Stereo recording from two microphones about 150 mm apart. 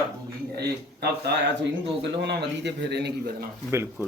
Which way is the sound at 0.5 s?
90° right.